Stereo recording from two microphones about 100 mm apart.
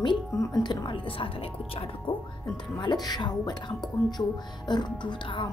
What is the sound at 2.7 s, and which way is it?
Speech, 45° left (ahead or behind).